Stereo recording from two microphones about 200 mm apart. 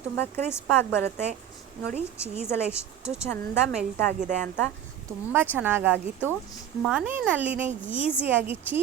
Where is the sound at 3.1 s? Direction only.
10° left (ahead or behind).